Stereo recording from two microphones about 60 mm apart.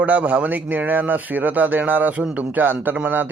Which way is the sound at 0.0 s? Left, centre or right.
Right.